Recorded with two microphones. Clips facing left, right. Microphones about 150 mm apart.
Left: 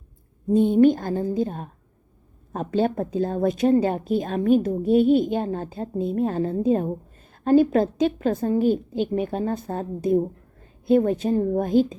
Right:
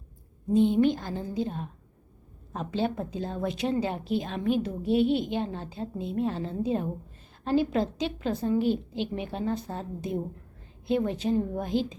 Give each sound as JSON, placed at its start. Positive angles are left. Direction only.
{"t": 0.5, "sound": "a woman's voice", "side_deg": 50}